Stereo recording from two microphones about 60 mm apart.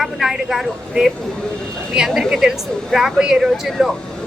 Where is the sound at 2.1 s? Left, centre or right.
Centre.